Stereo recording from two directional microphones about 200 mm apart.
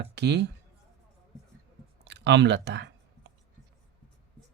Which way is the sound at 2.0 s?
60° right (ahead or behind).